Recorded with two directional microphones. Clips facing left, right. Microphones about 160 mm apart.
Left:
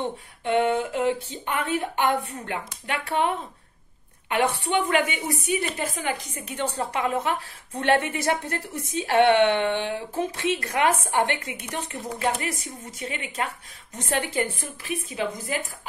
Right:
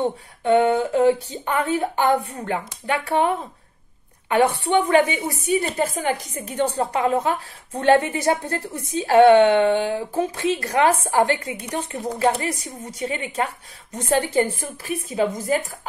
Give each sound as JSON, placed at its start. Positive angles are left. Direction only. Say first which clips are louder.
{"t": 0.0, "sound": "a sound", "louder": "right 6 dB", "side_deg": -45}
{"t": 0.6, "sound": "a woman's voice", "louder": "right 4 dB", "side_deg": -35}
{"t": 4.3, "sound": "a woman's voice", "louder": "right 5 dB", "side_deg": -30}